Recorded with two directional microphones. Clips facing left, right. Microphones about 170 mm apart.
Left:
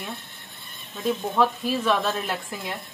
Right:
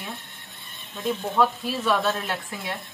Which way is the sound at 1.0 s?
5° left (ahead or behind).